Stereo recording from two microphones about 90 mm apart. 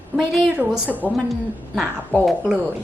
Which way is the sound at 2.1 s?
15° left (ahead or behind).